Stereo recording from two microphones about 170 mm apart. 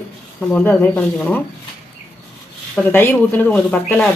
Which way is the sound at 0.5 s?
10° left (ahead or behind).